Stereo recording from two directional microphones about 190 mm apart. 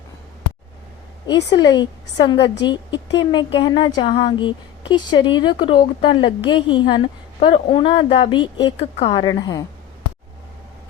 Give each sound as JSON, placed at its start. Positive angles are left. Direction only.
{"t": 1.5, "sound": "speech", "side_deg": 20}